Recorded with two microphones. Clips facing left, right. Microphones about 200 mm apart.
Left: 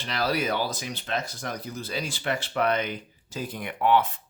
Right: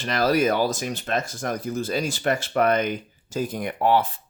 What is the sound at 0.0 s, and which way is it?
Speech, 45° right (ahead or behind).